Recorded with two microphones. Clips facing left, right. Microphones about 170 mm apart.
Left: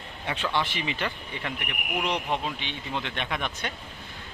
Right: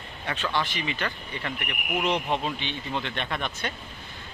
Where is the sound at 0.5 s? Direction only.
25° left (ahead or behind).